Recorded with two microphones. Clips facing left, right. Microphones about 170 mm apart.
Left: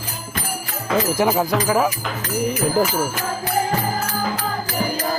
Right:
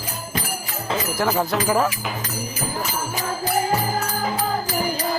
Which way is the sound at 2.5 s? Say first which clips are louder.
Left 8 dB; 65° left (ahead or behind).